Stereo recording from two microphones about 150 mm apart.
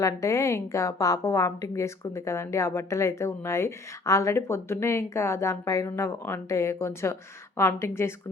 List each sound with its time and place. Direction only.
0.0 s a woman's voice: 20° left (ahead or behind)